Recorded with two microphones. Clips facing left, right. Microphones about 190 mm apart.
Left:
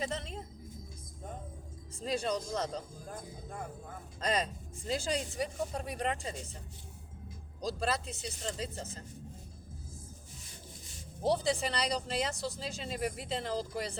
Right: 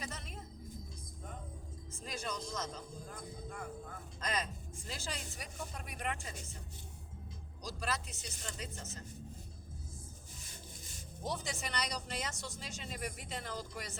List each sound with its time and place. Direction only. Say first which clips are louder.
0.1 s music: left 9 dB; 30° left (ahead or behind)
2.0 s speech: left 9 dB; 35° left (ahead or behind)
4.2 s speech: left 6 dB; 30° left (ahead or behind)
7.6 s speech: left 7 dB; 30° left (ahead or behind)
11.2 s speech: left 11 dB; 35° left (ahead or behind)